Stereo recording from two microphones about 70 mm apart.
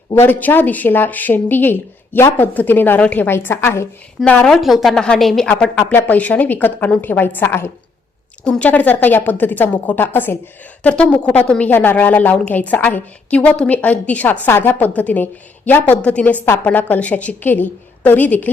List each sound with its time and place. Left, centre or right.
0.1 s a woman's voice: left
3.2 s a woman's voice: left
4.4 s speech: centre
4.9 s speech: centre
5.9 s a woman's voice: left
8.4 s a woman's voice: centre
10.8 s a woman's voice: centre